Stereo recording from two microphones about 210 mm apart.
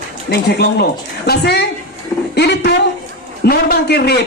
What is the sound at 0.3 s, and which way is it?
A man's voice, 50° left (ahead or behind).